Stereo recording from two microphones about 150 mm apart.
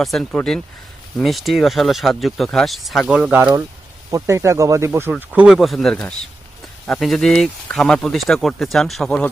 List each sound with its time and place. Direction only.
0.0 s speech: centre (ahead or behind)
4.1 s speech: 20° right (ahead or behind)
5.1 s speech: 5° right (ahead or behind)